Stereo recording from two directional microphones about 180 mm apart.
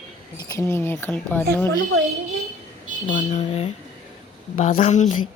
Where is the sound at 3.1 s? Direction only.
40° left (ahead or behind).